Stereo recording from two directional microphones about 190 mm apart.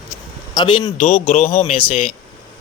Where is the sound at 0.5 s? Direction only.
25° left (ahead or behind).